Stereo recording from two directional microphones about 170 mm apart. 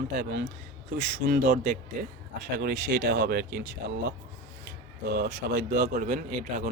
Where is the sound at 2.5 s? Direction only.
70° right (ahead or behind).